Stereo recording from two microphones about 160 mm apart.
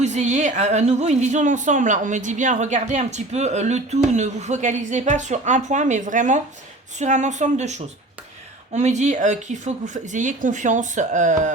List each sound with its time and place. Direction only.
0.0 s a woman's voice: 45° right (ahead or behind)